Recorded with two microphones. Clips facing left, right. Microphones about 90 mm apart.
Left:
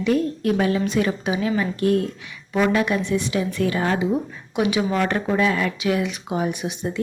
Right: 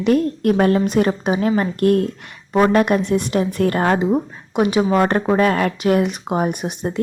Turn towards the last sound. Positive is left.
turn(degrees=-50)  # may be behind; listen again after turning